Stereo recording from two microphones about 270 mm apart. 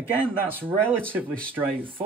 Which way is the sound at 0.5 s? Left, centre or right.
Centre.